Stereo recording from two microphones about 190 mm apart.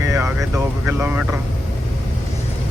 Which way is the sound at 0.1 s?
15° right (ahead or behind).